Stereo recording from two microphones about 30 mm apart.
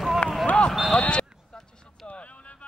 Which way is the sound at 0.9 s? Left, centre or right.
Left.